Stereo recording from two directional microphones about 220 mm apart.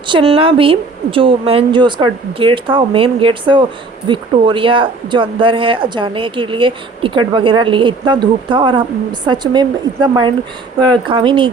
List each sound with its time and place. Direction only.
0.1 s speech: 25° right (ahead or behind)